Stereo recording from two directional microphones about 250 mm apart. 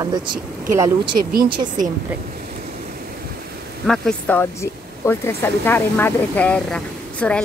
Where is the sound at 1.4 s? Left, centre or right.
Centre.